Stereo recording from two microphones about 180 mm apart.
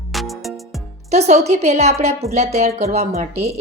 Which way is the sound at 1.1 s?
40° right (ahead or behind).